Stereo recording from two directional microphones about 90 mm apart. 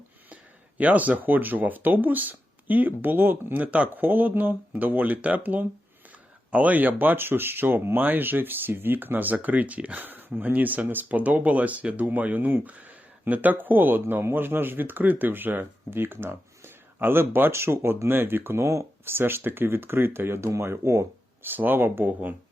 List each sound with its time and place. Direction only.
0.8 s speech: 15° right (ahead or behind); by 21.5 s 35° right (ahead or behind)
21.5 s speech: 20° right (ahead or behind)